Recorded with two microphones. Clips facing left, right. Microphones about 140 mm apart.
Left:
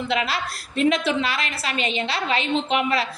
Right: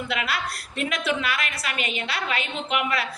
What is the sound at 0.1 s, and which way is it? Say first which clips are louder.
A woman's voice: left 4 dB; 25° left (ahead or behind).